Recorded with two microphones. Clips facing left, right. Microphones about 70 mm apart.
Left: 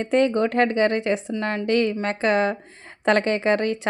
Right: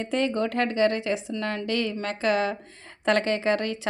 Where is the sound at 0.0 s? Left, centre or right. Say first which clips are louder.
Left 6 dB; left.